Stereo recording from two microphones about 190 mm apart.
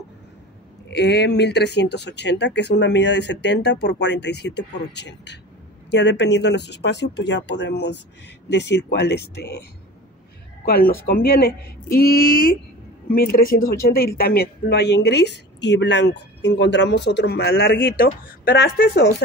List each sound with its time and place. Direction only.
0.8 s a woman's voice: 60° left (ahead or behind)